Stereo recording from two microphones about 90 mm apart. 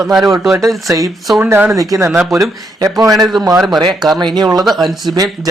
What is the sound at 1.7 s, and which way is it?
Speech, 35° right (ahead or behind).